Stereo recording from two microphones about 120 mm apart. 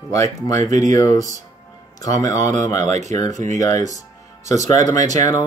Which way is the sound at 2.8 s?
75° right (ahead or behind).